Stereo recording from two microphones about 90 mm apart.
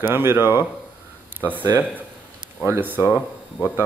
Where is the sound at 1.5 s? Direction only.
20° right (ahead or behind).